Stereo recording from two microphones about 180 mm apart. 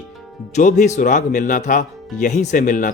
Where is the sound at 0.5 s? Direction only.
45° left (ahead or behind).